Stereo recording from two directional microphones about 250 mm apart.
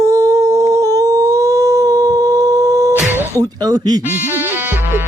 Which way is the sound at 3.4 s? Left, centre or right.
Centre.